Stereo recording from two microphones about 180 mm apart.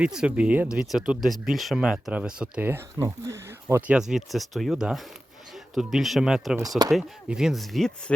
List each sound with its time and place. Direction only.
0.0 s speech: 5° right (ahead or behind)
6.6 s speech: 20° right (ahead or behind)
6.9 s speech: 5° right (ahead or behind)